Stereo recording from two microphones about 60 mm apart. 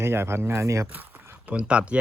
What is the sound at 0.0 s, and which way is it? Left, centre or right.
Speech, right.